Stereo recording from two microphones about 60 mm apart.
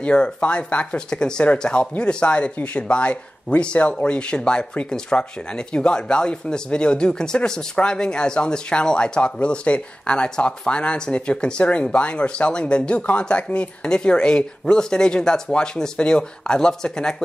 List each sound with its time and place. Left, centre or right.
0.0 s speech: centre